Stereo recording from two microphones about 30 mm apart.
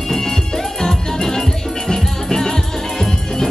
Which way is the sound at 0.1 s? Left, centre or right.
Centre.